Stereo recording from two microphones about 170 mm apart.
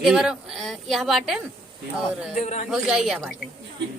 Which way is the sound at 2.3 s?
45° left (ahead or behind).